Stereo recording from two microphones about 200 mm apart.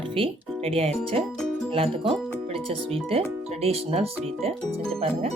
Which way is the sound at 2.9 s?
30° right (ahead or behind).